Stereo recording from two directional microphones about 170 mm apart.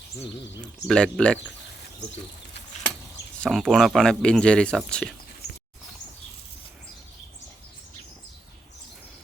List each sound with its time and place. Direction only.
0.6 s speech: 5° left (ahead or behind)
3.3 s speech: 5° left (ahead or behind)